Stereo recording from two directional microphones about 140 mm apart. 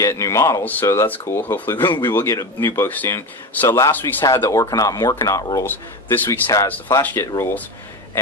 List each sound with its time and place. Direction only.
0.0 s speech: 20° left (ahead or behind)